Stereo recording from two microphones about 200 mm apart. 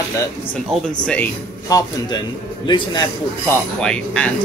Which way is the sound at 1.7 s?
20° left (ahead or behind).